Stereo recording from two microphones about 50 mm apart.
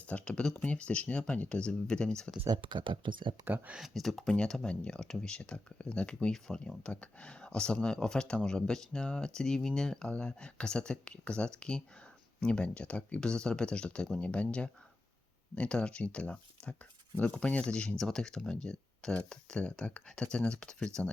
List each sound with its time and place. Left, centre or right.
0.1 s speech: left
3.8 s speech: centre
4.4 s speech: centre